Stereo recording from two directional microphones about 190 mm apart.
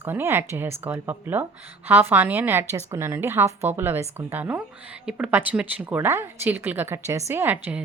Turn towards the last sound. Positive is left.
turn(degrees=-10)  # may be behind; listen again after turning